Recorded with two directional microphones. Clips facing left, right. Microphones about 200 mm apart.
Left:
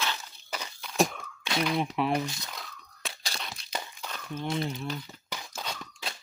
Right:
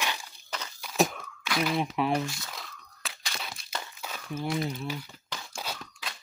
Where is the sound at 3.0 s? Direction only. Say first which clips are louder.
Left 1 dB; 35° left (ahead or behind).